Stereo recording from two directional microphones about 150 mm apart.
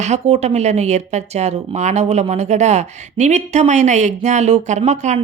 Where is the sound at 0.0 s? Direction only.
50° right (ahead or behind).